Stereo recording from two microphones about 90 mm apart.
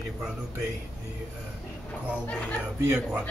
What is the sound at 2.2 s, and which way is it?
Speech, 15° left (ahead or behind).